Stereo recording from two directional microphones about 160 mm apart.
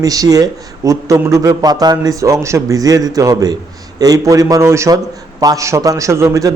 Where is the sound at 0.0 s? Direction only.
20° right (ahead or behind).